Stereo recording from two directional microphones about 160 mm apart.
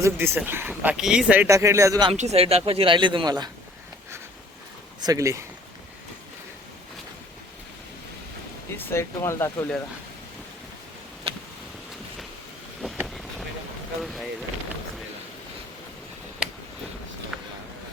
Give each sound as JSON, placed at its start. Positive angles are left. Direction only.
{"t": 0.0, "sound": "speech", "side_deg": -15}
{"t": 1.5, "sound": "speech", "side_deg": -20}
{"t": 2.1, "sound": "speech", "side_deg": -40}
{"t": 5.0, "sound": "speech", "side_deg": -20}
{"t": 8.7, "sound": "speech", "side_deg": 15}
{"t": 14.0, "sound": "speech", "side_deg": 0}
{"t": 17.3, "sound": "a sound", "side_deg": 0}